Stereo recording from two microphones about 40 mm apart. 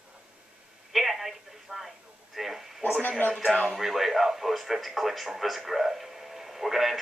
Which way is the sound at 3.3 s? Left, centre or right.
Centre.